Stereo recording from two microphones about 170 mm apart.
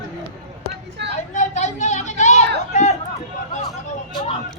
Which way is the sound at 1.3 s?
45° left (ahead or behind).